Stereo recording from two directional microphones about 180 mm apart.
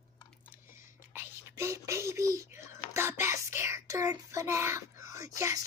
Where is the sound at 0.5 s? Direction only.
15° right (ahead or behind).